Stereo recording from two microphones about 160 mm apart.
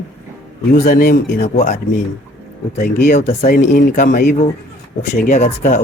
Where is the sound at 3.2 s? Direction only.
55° left (ahead or behind).